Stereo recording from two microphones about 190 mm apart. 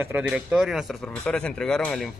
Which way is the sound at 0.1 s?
5° right (ahead or behind).